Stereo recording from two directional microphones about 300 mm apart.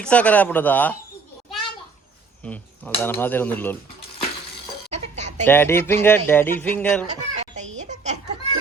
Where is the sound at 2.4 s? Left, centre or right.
Centre.